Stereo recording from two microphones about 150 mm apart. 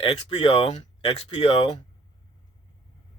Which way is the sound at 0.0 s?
35° left (ahead or behind).